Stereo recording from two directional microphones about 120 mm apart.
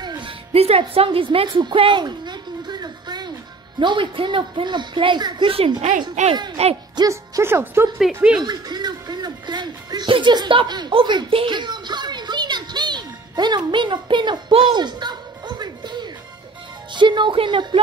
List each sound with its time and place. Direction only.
0.0 s music: 35° right (ahead or behind)
0.5 s speech: 55° right (ahead or behind)
6.3 s speech: 35° right (ahead or behind)
7.0 s speech: 25° right (ahead or behind)
8.4 s speech: 35° right (ahead or behind)